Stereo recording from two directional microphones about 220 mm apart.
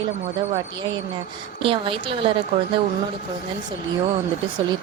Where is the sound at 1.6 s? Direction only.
25° right (ahead or behind).